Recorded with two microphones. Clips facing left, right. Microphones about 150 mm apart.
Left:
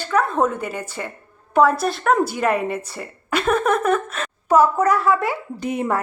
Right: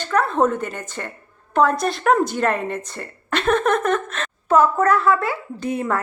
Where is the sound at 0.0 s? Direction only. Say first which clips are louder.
Right 1 dB; 5° left (ahead or behind).